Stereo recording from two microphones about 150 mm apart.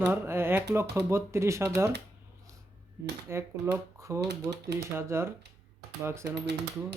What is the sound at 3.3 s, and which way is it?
Speech, 15° right (ahead or behind).